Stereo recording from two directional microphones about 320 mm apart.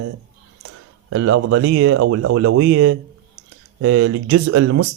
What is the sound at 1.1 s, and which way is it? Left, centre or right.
Speech, right.